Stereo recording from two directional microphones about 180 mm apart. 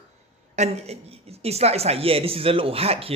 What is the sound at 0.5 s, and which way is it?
A man's voice, 40° right (ahead or behind).